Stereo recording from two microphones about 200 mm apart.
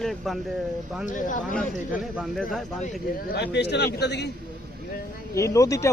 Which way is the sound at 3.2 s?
55° left (ahead or behind).